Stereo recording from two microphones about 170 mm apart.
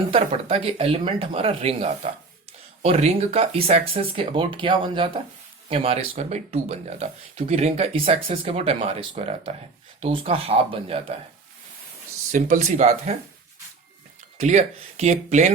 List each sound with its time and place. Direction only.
0.1 s speech: 35° right (ahead or behind)
12.3 s speech: 50° right (ahead or behind)
14.3 s speech: 40° right (ahead or behind)